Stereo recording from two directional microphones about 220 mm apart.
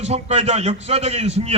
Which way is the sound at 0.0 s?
30° right (ahead or behind).